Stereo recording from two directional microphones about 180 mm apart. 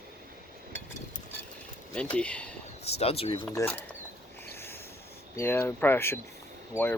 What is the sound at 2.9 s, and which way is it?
Speech, 35° left (ahead or behind).